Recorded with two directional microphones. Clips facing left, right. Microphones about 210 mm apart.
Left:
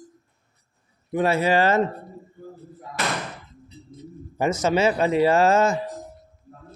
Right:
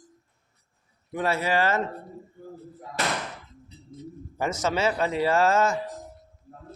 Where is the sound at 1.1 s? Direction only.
15° left (ahead or behind).